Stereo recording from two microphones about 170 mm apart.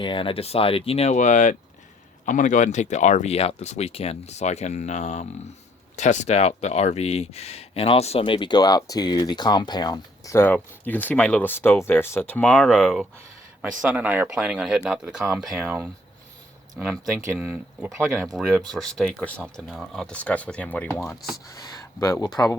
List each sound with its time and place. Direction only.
0.0 s speech: 30° left (ahead or behind); by 15.9 s 10° right (ahead or behind)
16.7 s speech: centre (ahead or behind); by 18.2 s 15° right (ahead or behind)
18.2 s speech: centre (ahead or behind)
21.4 s speech: 20° left (ahead or behind)